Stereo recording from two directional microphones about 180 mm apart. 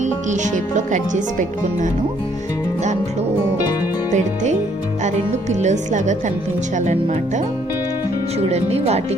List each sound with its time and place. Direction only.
0.0 s speech: 40° right (ahead or behind)
5.0 s speech: 40° right (ahead or behind)
8.4 s speech: 35° right (ahead or behind)